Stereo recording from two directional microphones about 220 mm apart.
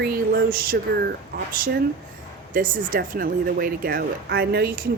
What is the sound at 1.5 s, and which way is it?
Speech, 40° right (ahead or behind).